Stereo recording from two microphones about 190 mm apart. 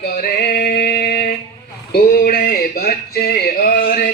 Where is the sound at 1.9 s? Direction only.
50° left (ahead or behind).